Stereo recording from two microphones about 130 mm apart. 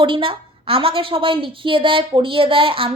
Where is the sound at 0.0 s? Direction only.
40° right (ahead or behind).